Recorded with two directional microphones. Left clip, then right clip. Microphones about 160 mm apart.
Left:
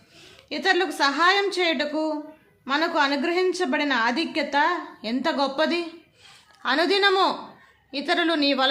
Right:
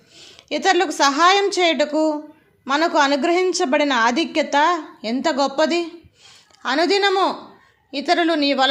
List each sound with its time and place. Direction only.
0.2 s a woman's voice: 35° right (ahead or behind)